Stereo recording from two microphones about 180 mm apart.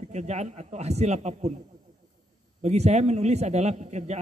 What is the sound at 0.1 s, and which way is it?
Speech, 40° right (ahead or behind).